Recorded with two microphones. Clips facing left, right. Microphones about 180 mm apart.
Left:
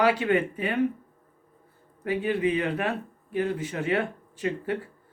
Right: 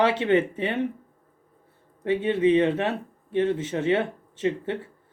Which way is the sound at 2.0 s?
25° right (ahead or behind).